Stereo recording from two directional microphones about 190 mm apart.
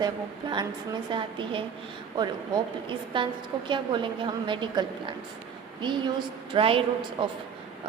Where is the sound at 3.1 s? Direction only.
25° right (ahead or behind).